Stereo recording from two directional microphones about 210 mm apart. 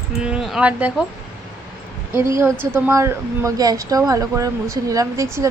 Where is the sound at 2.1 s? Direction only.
15° right (ahead or behind).